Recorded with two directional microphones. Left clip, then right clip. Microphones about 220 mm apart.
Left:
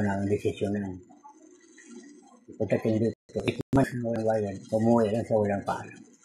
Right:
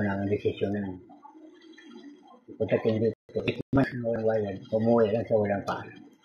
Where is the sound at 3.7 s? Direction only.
55° left (ahead or behind).